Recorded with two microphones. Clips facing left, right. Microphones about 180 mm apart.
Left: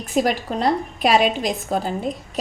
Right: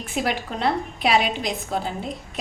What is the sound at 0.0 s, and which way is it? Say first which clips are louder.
A woman's voice: left 5 dB; 40° left (ahead or behind).